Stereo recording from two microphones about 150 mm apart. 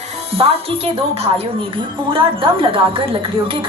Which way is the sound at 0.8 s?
45° right (ahead or behind).